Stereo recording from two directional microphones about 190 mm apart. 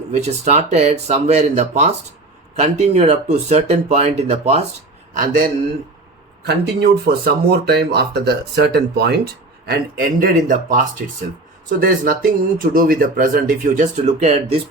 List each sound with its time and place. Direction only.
0.1 s speech: 35° right (ahead or behind)
5.1 s speech: 45° right (ahead or behind)
6.4 s speech: 55° right (ahead or behind); by 14.6 s 35° right (ahead or behind)